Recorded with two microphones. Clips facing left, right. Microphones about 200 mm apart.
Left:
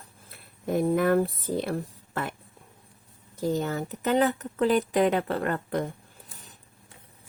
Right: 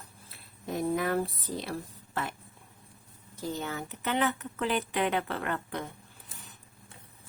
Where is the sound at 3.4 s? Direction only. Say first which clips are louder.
Left 8 dB; 45° left (ahead or behind).